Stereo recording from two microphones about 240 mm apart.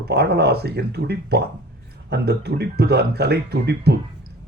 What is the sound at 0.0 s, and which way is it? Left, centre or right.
A man's voice, right.